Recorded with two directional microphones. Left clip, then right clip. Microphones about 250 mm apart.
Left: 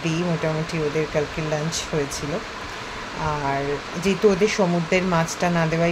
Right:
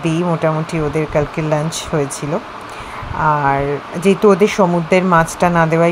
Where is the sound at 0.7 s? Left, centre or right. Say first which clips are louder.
Right 5 dB; right.